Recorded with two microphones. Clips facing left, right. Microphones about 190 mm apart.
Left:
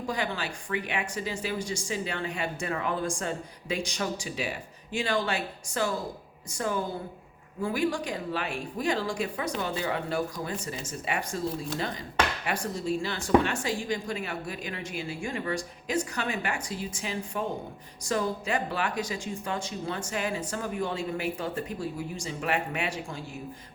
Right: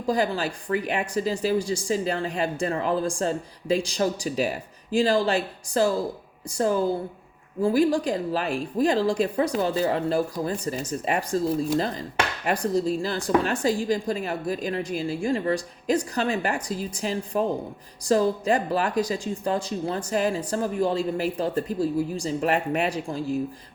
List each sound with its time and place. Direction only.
0.1 s speech: 35° right (ahead or behind)